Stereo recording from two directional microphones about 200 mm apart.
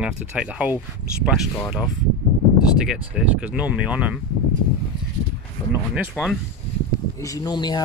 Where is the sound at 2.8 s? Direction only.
5° right (ahead or behind).